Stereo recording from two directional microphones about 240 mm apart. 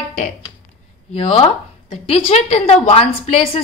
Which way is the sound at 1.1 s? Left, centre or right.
Left.